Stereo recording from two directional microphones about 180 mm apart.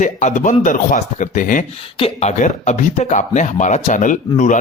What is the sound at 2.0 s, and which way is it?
Speech, 35° left (ahead or behind).